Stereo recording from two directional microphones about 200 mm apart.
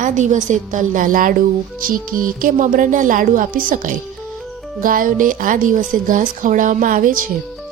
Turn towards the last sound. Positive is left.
turn(degrees=-45)  # may be behind; listen again after turning